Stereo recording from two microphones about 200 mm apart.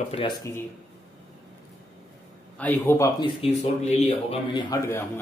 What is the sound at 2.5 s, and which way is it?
Speech, 10° left (ahead or behind).